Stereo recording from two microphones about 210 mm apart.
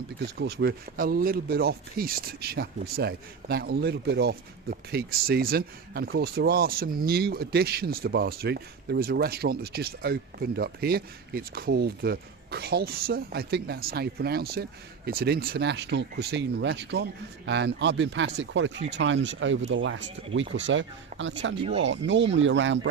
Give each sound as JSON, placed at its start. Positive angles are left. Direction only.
{"t": 0.3, "sound": "speech", "side_deg": -50}